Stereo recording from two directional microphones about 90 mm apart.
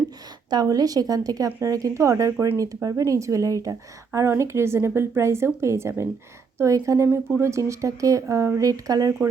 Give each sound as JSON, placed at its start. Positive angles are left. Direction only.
{"t": 0.5, "sound": "a woman's voice", "side_deg": -45}